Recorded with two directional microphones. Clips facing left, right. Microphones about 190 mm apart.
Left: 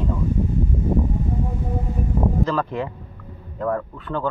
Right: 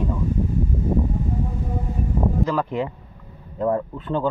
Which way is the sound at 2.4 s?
15° right (ahead or behind).